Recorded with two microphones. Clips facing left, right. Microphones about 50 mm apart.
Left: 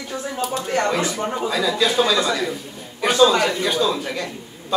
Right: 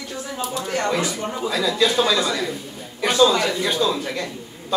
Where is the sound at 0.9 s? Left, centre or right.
Left.